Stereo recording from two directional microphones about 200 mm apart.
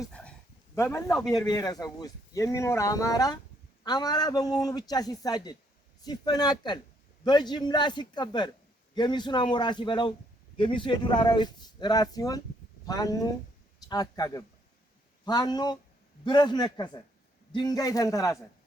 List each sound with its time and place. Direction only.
0.0 s a man's voice: 5° left (ahead or behind)